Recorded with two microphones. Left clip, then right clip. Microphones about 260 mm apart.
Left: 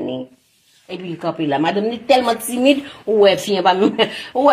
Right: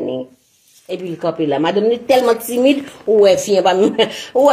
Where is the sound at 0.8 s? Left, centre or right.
Left.